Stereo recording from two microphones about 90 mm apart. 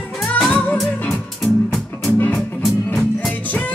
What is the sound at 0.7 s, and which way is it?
Music, centre (ahead or behind).